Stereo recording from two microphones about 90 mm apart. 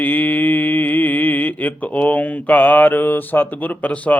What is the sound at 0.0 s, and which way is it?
Mantra, 20° left (ahead or behind).